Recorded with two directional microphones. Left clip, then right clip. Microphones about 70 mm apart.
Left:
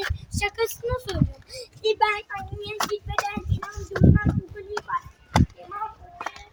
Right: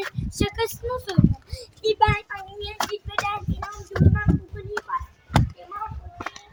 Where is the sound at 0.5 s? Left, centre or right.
Right.